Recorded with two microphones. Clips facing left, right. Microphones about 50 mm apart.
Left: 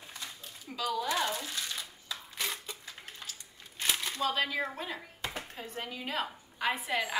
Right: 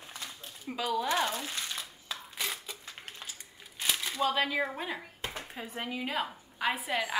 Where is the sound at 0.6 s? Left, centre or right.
Right.